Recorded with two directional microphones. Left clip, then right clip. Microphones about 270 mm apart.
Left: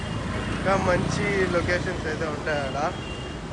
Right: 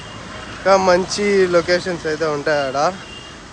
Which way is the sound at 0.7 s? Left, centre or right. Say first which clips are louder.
Right 10 dB; centre.